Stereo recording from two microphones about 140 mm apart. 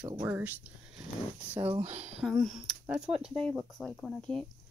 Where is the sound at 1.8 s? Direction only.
55° right (ahead or behind).